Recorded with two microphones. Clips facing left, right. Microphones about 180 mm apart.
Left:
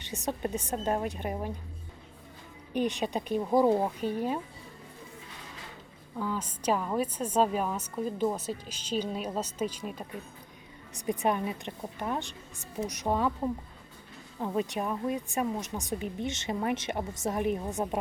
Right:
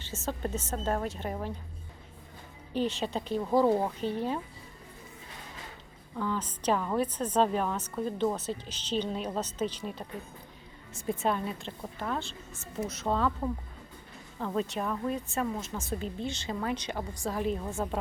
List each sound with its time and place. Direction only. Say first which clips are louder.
0.0 s a woman's voice: left 2 dB; 15° left (ahead or behind)
2.7 s a woman's voice: left 1 dB; 15° left (ahead or behind)
6.1 s a woman's voice: right 1 dB; 10° left (ahead or behind)